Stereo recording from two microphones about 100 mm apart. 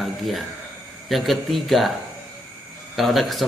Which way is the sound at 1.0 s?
Centre (ahead or behind).